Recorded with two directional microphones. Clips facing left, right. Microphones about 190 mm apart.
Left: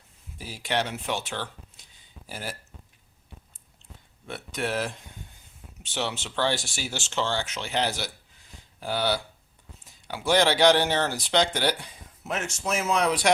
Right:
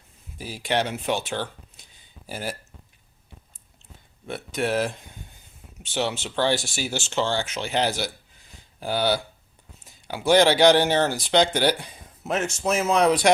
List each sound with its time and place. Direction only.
0.3 s speech: 15° right (ahead or behind)
4.3 s speech: 15° right (ahead or behind)
5.9 s speech: 10° right (ahead or behind)
12.2 s speech: 35° right (ahead or behind)